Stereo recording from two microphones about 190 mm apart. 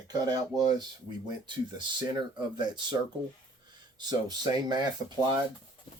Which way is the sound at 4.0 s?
20° right (ahead or behind).